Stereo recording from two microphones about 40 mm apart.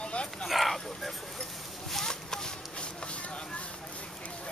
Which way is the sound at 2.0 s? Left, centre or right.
Centre.